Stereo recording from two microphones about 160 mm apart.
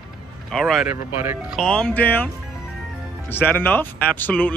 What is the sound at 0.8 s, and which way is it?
Speech, 10° right (ahead or behind).